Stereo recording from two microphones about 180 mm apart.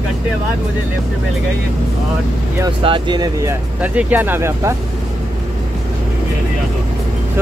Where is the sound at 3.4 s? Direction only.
10° right (ahead or behind).